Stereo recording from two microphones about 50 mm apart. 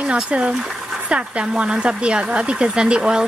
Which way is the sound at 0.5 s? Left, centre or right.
Centre.